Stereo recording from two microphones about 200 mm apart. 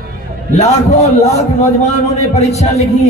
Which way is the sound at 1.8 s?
35° left (ahead or behind).